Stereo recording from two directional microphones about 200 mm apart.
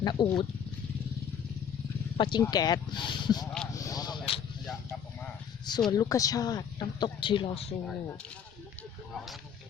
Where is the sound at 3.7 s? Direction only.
15° left (ahead or behind).